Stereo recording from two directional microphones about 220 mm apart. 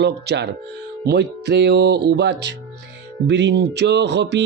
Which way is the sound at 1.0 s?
50° right (ahead or behind).